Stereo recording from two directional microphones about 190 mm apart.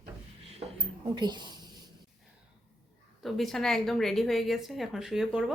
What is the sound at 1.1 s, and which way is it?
Speech, 25° right (ahead or behind).